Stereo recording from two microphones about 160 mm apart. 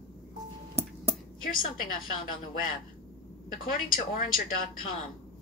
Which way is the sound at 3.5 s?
60° left (ahead or behind).